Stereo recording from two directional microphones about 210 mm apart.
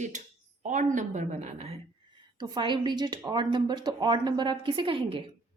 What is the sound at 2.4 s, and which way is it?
Speech, 20° right (ahead or behind).